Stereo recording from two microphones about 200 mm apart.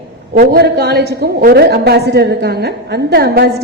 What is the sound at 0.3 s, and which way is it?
A woman's voice, 55° right (ahead or behind).